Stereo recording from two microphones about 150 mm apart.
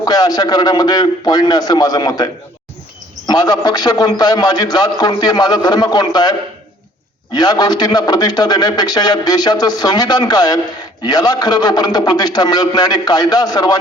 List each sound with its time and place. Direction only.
0.0 s a man's voice: 25° left (ahead or behind)
7.3 s a man's voice: 30° left (ahead or behind)